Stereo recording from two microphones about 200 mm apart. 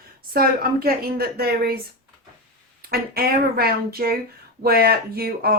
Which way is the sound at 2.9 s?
50° right (ahead or behind).